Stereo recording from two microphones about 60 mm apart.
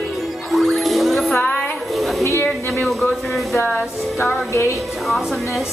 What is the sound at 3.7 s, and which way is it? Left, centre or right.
Music, left.